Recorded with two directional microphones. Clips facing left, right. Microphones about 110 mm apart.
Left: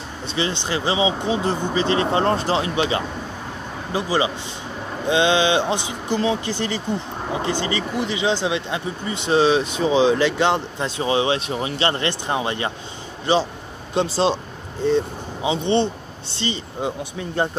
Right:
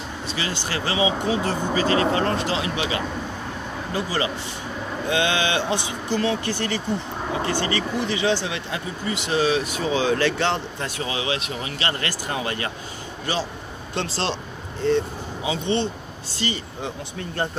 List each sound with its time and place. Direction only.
0.3 s speech: 25° left (ahead or behind)
3.9 s speech: 20° left (ahead or behind)
11.0 s speech: 30° left (ahead or behind)
13.9 s speech: 15° left (ahead or behind)